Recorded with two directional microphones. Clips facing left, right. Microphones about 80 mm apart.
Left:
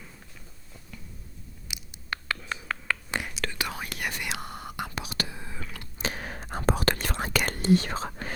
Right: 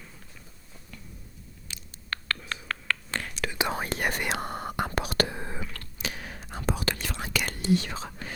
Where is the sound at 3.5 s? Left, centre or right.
Right.